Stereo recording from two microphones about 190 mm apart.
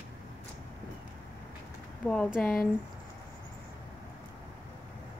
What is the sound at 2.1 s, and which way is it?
Speech, centre (ahead or behind).